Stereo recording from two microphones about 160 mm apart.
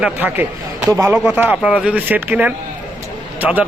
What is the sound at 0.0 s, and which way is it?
Speech, 10° right (ahead or behind).